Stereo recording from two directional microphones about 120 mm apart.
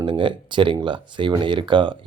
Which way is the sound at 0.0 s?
45° right (ahead or behind).